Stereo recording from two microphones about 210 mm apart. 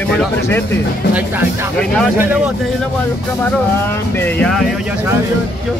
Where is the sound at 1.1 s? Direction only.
10° right (ahead or behind).